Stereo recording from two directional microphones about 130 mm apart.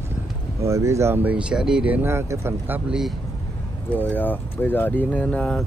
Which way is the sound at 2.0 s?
20° right (ahead or behind).